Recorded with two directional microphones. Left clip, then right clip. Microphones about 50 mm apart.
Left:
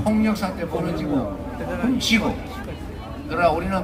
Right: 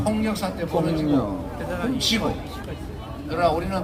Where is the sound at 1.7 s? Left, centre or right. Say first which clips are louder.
Left 2 dB; right.